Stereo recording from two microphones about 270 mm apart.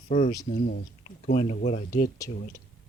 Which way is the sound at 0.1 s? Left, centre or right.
Left.